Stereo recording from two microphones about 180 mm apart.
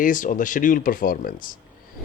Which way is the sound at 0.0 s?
45° left (ahead or behind).